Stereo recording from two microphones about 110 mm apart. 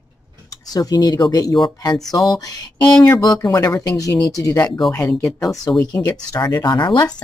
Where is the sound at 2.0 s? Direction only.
Centre (ahead or behind).